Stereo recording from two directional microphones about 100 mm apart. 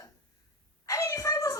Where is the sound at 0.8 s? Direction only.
30° left (ahead or behind).